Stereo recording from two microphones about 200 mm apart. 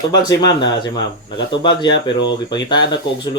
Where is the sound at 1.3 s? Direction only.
60° left (ahead or behind).